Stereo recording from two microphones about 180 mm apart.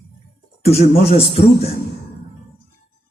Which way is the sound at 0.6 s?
35° left (ahead or behind).